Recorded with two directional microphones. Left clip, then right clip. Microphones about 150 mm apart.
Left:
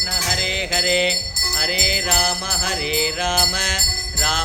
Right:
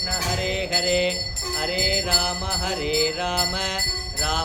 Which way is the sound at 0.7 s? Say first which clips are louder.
Left 3 dB; 5° right (ahead or behind).